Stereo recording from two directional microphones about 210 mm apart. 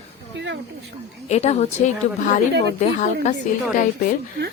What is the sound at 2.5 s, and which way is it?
Speech, 55° right (ahead or behind).